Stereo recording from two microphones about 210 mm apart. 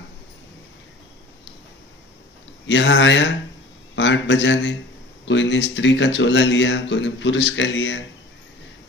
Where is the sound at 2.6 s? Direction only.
60° left (ahead or behind).